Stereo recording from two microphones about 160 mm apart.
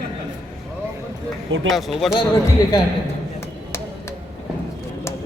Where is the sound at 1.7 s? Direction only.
Centre (ahead or behind).